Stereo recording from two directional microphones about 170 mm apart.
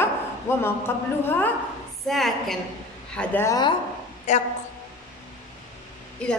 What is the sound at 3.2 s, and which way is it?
Speech, 15° left (ahead or behind).